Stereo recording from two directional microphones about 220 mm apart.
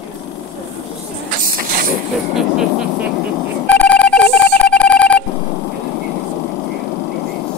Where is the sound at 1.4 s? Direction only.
40° right (ahead or behind).